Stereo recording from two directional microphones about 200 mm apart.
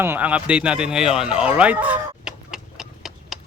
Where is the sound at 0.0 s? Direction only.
10° right (ahead or behind).